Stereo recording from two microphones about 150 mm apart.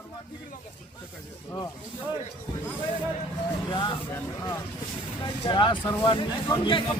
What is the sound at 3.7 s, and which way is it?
Speech, 30° left (ahead or behind).